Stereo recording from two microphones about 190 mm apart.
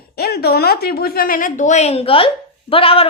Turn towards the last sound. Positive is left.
turn(degrees=30)  # may be behind; listen again after turning